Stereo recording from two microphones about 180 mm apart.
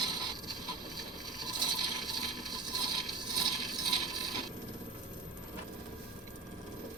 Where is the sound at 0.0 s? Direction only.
25° right (ahead or behind).